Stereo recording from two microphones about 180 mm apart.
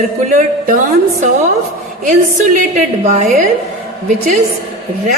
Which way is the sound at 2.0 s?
45° right (ahead or behind).